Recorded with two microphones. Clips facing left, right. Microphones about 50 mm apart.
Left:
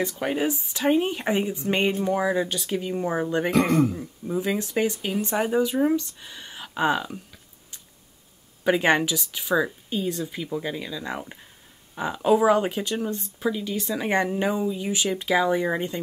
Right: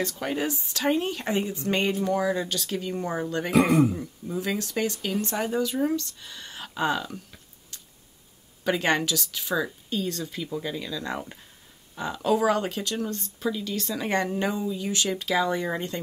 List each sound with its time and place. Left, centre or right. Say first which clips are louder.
0.0 s speech: left 3 dB; centre
3.5 s speech: right 2 dB; centre
4.0 s speech: left 3 dB; centre
8.6 s speech: left 4 dB; centre